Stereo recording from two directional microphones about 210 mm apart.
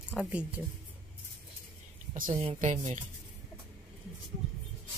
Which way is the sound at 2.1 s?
30° right (ahead or behind).